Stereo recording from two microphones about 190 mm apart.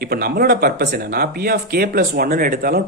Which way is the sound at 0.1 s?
55° right (ahead or behind).